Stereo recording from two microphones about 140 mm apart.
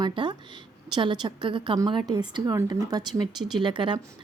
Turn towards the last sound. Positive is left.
turn(degrees=-35)  # may be behind; listen again after turning